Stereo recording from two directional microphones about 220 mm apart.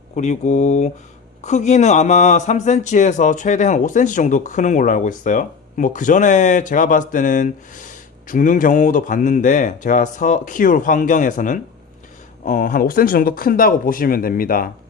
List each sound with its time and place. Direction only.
0.2 s a man's voice: 30° left (ahead or behind)